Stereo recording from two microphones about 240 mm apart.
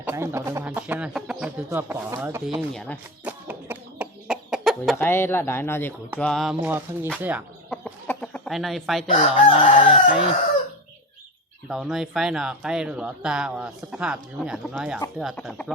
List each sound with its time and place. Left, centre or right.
0.0 s speech: centre
2.7 s speech: centre
3.2 s chicken: centre
6.1 s speech: centre
7.7 s chicken: centre
9.0 s chicken: left
11.7 s speech: centre